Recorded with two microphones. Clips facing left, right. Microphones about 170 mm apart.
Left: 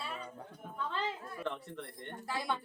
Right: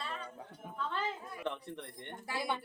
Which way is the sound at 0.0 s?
10° left (ahead or behind).